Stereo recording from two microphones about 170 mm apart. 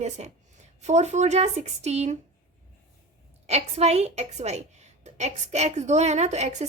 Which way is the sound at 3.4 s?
40° right (ahead or behind).